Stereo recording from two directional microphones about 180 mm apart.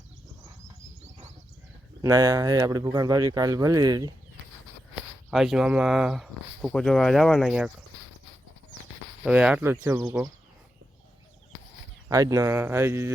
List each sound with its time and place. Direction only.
2.0 s speech: 20° right (ahead or behind)
4.9 s speech: centre (ahead or behind)
9.2 s speech: 5° right (ahead or behind)
12.0 s speech: 20° right (ahead or behind)